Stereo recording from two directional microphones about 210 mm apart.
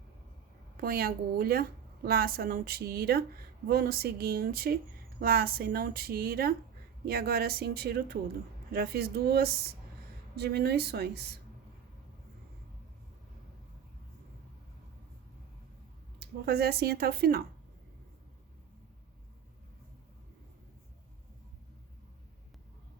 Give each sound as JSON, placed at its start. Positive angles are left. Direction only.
{"t": 0.8, "sound": "speech", "side_deg": -45}
{"t": 16.2, "sound": "speech", "side_deg": -50}